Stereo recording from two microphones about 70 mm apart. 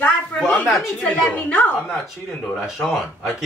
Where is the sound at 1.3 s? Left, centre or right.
Left.